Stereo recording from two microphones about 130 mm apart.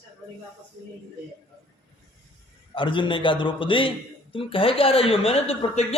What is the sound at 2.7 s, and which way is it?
A man's voice, 40° left (ahead or behind).